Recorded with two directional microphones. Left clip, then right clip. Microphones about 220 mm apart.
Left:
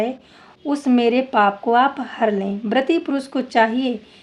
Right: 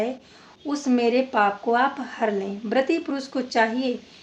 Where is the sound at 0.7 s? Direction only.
40° left (ahead or behind).